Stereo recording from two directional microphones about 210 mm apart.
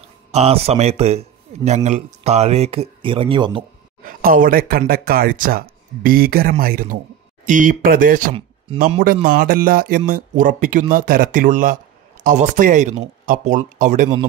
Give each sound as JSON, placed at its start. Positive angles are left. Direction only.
{"t": 0.3, "sound": "a man's voice", "side_deg": -30}
{"t": 4.0, "sound": "speech", "side_deg": -40}